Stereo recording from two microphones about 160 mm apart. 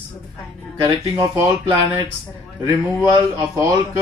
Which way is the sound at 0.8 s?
20° right (ahead or behind).